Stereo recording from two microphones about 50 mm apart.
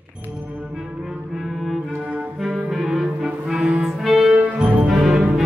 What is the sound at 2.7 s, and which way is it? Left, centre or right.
Clarinet, centre.